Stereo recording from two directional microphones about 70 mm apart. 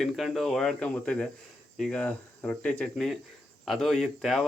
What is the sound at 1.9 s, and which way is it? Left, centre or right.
Speech, centre.